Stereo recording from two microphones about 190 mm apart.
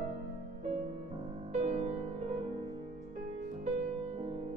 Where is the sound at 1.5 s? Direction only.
35° right (ahead or behind).